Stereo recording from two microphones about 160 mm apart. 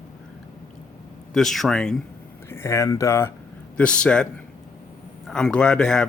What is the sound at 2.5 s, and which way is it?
Speech, 15° left (ahead or behind).